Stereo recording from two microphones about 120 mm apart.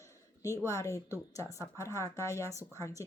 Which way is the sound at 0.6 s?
25° left (ahead or behind).